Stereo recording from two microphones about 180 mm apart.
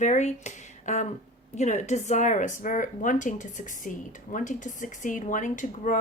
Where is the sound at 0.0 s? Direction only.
40° left (ahead or behind).